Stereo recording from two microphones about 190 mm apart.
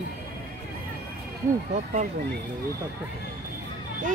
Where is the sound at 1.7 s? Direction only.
40° right (ahead or behind).